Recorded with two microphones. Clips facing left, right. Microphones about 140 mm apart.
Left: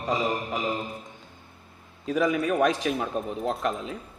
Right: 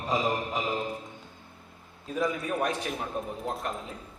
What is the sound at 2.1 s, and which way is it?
Speech, 90° left.